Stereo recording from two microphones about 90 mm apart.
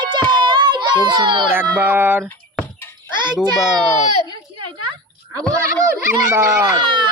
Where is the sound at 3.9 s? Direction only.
60° right (ahead or behind).